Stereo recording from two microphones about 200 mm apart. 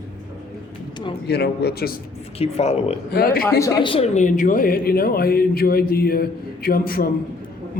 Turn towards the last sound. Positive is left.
turn(degrees=50)  # may be behind; listen again after turning